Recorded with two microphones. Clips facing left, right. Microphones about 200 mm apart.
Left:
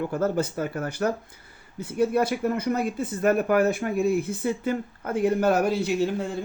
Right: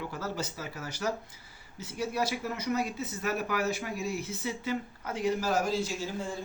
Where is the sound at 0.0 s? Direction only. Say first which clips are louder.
Left 11 dB; 50° left (ahead or behind).